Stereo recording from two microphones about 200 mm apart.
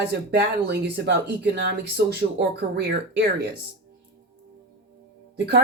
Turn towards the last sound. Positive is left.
turn(degrees=-55)  # may be behind; listen again after turning